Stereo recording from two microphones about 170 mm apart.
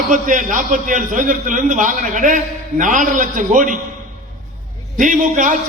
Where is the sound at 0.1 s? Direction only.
50° right (ahead or behind).